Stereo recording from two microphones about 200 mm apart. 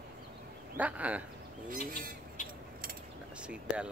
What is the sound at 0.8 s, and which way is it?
Speech, 5° right (ahead or behind).